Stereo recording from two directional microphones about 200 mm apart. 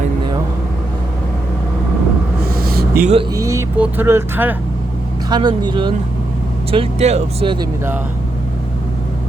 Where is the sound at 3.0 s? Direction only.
30° right (ahead or behind).